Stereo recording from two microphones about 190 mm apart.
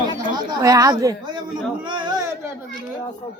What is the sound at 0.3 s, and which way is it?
Speech, 20° right (ahead or behind).